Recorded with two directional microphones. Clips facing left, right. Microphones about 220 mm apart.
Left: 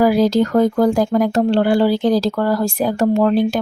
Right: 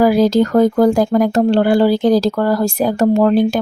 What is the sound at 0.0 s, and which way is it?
Speech, 45° right (ahead or behind).